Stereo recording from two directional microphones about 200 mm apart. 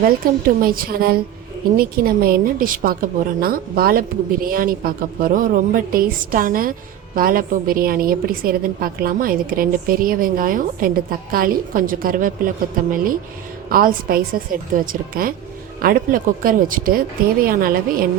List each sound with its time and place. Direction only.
0.0 s a woman's voice: 45° right (ahead or behind)
13.7 s a woman's voice: 45° right (ahead or behind)